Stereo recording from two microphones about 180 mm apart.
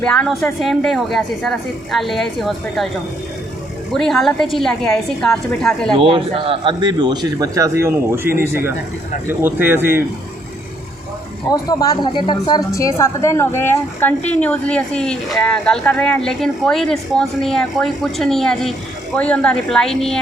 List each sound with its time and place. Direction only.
0.0 s speech: 5° left (ahead or behind)
3.9 s speech: centre (ahead or behind)
6.0 s a man's voice: 30° right (ahead or behind); by 10.0 s 10° right (ahead or behind)
11.5 s a woman's voice: 20° left (ahead or behind); by 20.1 s centre (ahead or behind)